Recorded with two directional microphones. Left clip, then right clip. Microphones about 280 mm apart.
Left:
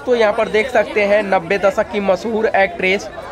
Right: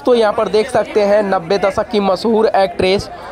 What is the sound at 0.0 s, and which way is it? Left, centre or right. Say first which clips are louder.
Speech: right 2 dB; right.